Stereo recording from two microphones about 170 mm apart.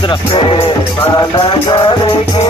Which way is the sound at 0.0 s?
30° left (ahead or behind).